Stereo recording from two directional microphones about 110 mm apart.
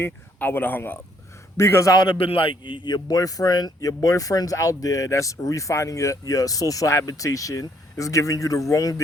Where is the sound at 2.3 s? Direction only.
55° left (ahead or behind).